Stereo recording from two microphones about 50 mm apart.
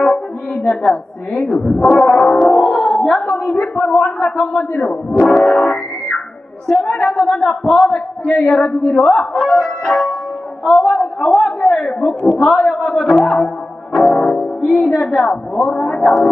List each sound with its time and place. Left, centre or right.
0.0 s music: centre
0.9 s speech: left
2.0 s music: centre
3.2 s a man's voice: centre
5.2 s music: centre
6.7 s speech: centre
8.7 s a woman's voice: left
9.0 s speech: centre
13.9 s music: centre
14.9 s speech: centre